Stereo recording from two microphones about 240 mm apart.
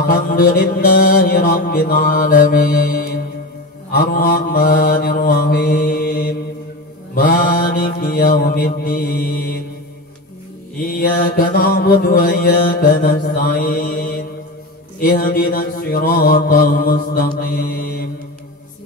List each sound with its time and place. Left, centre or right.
0.0 s mantra: left
10.8 s mantra: left